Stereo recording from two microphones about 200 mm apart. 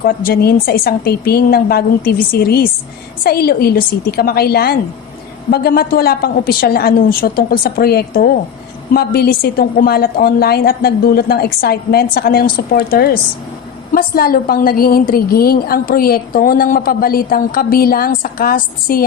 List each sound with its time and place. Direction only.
0.0 s a woman's voice: 45° left (ahead or behind)